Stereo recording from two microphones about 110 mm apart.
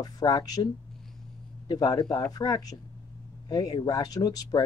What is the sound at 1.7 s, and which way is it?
Speech, 40° left (ahead or behind).